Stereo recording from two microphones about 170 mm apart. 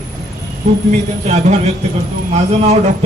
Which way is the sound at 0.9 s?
40° right (ahead or behind).